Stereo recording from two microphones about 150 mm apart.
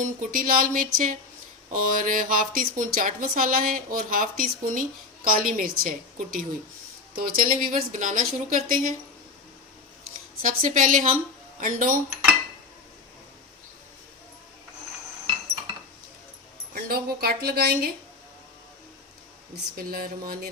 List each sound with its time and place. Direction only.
0.0 s speech: 60° right (ahead or behind)
10.4 s speech: 60° right (ahead or behind)
16.7 s a woman's voice: 90° right
19.7 s speech: 75° right (ahead or behind)